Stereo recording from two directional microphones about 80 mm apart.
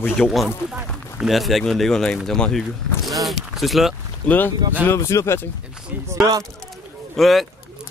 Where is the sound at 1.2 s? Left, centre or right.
Centre.